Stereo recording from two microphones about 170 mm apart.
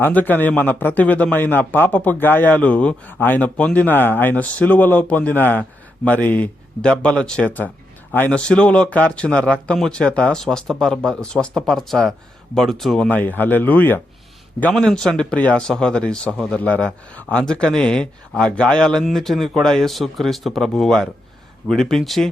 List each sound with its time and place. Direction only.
0.0 s a man's voice: 10° left (ahead or behind)